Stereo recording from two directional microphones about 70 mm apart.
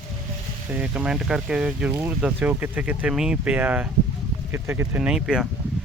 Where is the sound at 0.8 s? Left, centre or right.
Centre.